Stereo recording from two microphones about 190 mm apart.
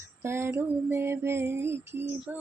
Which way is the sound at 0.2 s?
15° right (ahead or behind).